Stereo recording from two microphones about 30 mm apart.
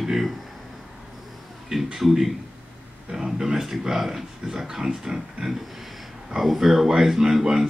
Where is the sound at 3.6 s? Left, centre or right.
Centre.